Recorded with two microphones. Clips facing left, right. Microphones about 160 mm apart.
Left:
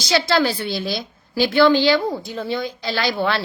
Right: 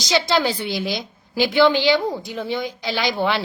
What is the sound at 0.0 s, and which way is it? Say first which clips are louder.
A woman's voice: left 1 dB; 15° right (ahead or behind).